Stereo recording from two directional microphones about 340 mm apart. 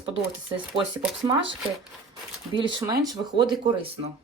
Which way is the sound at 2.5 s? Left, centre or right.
Centre.